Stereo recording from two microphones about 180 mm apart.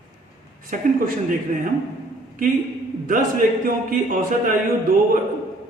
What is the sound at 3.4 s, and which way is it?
A man's voice, 50° right (ahead or behind).